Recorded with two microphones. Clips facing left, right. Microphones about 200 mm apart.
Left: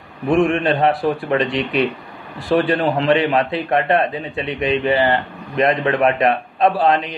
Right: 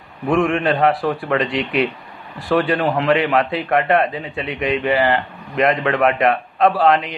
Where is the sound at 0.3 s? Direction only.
25° left (ahead or behind).